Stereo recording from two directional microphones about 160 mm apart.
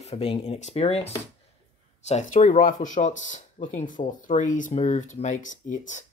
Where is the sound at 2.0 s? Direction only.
45° left (ahead or behind).